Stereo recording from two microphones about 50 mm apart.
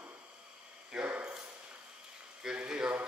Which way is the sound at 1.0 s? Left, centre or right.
Right.